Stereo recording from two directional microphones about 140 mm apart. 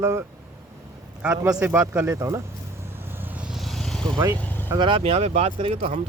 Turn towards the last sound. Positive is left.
turn(degrees=-45)  # may be behind; listen again after turning